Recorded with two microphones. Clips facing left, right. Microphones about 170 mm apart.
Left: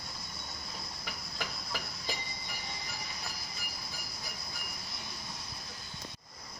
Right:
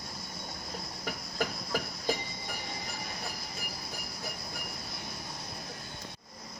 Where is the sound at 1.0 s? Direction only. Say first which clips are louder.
Right 9 dB; 50° right (ahead or behind).